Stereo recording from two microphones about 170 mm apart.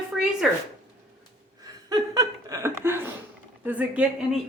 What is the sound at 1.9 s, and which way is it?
Chuckle, 20° right (ahead or behind).